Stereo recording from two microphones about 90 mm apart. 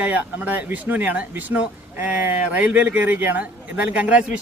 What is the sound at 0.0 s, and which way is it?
Speech, 20° right (ahead or behind).